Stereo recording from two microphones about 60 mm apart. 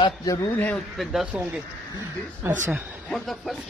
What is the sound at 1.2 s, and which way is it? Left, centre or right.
Speech, centre.